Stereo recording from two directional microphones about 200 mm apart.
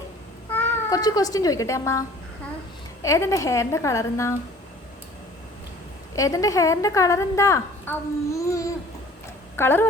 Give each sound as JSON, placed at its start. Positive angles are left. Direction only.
{"t": 0.5, "sound": "a woman's voice", "side_deg": 15}
{"t": 6.1, "sound": "a woman's voice", "side_deg": 15}